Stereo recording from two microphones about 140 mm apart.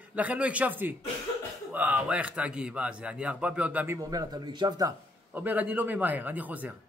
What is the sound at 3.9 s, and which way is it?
A man's voice, 25° right (ahead or behind).